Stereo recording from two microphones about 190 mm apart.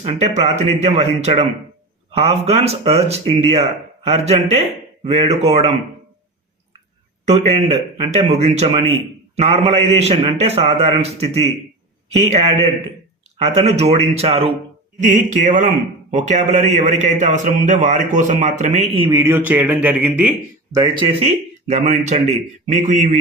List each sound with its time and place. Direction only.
0.0 s a man's voice: 35° right (ahead or behind)
7.3 s a man's voice: 30° right (ahead or behind)
15.0 s a man's voice: 40° right (ahead or behind)
18.9 s speech: 25° right (ahead or behind)
19.2 s speech: 10° right (ahead or behind)
20.7 s speech: 20° right (ahead or behind)
22.6 s a man's voice: 40° right (ahead or behind)